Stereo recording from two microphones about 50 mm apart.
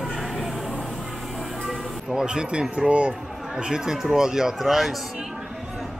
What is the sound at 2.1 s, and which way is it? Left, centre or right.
Speech, centre.